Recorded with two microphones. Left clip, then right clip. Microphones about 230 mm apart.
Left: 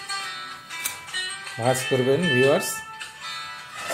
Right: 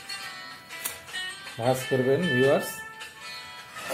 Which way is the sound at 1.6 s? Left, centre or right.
Left.